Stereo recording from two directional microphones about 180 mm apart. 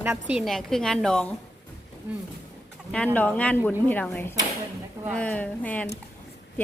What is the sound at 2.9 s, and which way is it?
A woman's voice, 5° left (ahead or behind).